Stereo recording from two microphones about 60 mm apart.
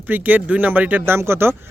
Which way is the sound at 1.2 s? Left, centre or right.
Right.